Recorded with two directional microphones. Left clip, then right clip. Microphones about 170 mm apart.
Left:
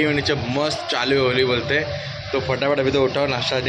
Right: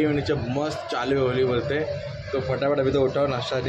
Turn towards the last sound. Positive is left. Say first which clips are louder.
# left 3 dB
turn(degrees=0)  # may be behind; listen again after turning